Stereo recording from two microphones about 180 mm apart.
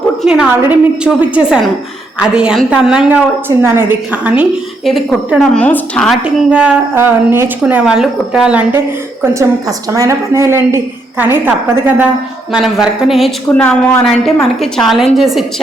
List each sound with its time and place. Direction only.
0.2 s a woman's voice: 5° right (ahead or behind)